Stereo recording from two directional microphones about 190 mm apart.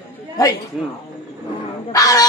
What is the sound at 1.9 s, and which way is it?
Speech, 20° left (ahead or behind).